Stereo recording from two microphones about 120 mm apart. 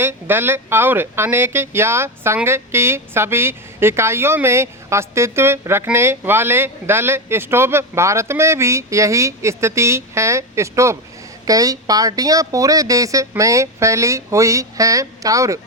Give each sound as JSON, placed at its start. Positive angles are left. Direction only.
{"t": 0.0, "sound": "speech", "side_deg": -20}